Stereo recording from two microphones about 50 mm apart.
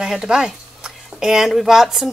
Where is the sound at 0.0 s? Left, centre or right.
Centre.